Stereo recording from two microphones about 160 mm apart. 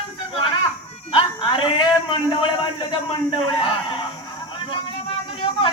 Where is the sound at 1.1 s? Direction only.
35° left (ahead or behind).